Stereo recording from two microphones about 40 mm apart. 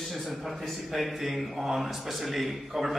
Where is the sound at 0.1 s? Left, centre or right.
Centre.